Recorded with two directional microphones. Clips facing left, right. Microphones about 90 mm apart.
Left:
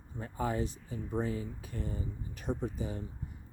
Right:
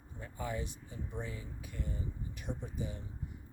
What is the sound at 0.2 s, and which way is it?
Speech, 40° left (ahead or behind).